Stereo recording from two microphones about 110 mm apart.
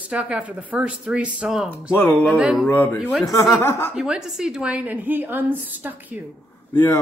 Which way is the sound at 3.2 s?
30° left (ahead or behind).